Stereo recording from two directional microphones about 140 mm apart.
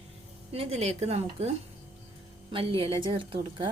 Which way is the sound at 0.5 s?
45° right (ahead or behind).